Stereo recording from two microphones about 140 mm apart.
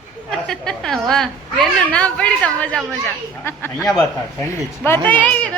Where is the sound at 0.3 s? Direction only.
5° left (ahead or behind).